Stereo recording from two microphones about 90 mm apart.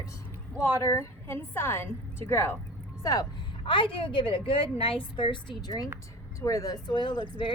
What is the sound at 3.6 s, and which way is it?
Speech, 70° left (ahead or behind).